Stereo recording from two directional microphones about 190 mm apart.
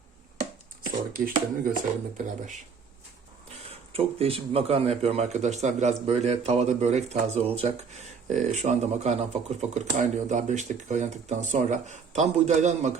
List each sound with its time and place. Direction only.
0.9 s speech: 50° right (ahead or behind)
3.5 s speech: 30° right (ahead or behind)